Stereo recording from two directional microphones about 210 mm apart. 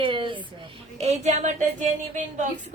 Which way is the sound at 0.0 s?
25° right (ahead or behind).